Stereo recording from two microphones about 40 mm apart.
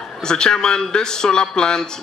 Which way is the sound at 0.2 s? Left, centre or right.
Centre.